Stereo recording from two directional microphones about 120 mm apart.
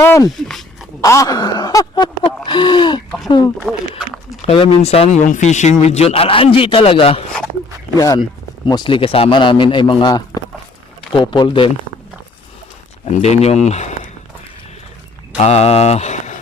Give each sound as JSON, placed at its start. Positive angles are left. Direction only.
{"t": 0.0, "sound": "speech", "side_deg": 25}
{"t": 0.3, "sound": "speech", "side_deg": 5}
{"t": 1.0, "sound": "speech", "side_deg": 25}
{"t": 3.6, "sound": "speech", "side_deg": -10}
{"t": 4.4, "sound": "speech", "side_deg": 50}
{"t": 6.1, "sound": "a man's voice", "side_deg": 50}
{"t": 7.9, "sound": "a man's voice", "side_deg": 30}
{"t": 13.1, "sound": "speech", "side_deg": 65}
{"t": 15.4, "sound": "speech", "side_deg": 65}